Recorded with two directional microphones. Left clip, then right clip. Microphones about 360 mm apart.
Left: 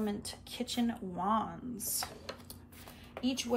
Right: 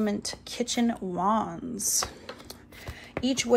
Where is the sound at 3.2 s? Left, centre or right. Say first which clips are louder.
Right 7 dB; centre.